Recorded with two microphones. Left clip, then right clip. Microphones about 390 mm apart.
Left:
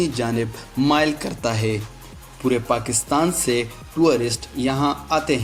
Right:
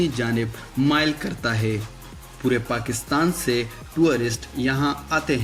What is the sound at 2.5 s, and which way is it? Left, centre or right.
Speech, left.